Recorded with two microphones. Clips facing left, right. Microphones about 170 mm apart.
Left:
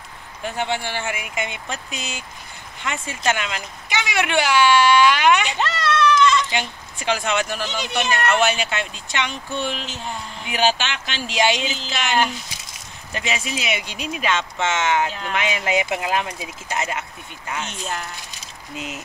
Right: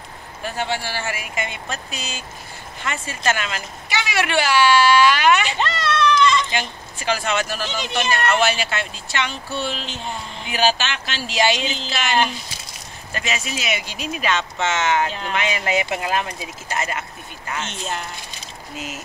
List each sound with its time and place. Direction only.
0.6 s speech: 20° left (ahead or behind)
8.1 s speech: centre (ahead or behind)
8.5 s speech: 15° left (ahead or behind)